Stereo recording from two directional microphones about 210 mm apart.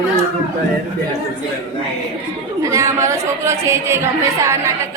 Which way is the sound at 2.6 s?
15° right (ahead or behind).